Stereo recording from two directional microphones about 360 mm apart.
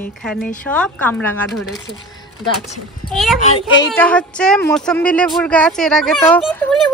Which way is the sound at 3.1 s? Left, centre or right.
Centre.